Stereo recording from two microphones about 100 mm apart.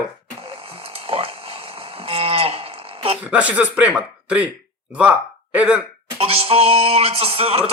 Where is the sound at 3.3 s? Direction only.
15° right (ahead or behind).